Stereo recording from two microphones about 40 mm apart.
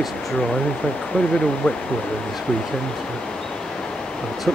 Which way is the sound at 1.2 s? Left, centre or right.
Centre.